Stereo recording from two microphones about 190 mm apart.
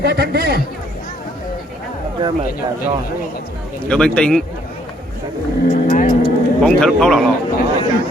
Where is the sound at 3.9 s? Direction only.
5° left (ahead or behind).